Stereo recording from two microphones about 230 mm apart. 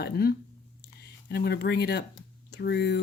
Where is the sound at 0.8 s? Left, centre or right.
Left.